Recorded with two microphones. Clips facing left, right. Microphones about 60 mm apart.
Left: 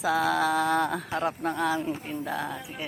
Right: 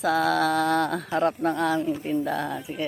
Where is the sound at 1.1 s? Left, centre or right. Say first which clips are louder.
Right 5 dB; centre.